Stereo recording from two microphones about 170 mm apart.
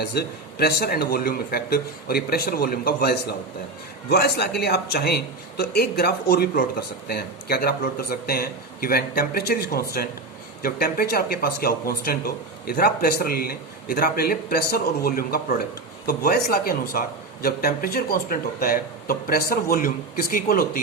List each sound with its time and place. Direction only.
0.0 s speech: 70° left (ahead or behind)